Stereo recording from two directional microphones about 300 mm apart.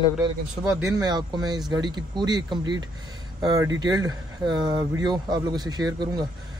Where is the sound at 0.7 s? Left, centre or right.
Centre.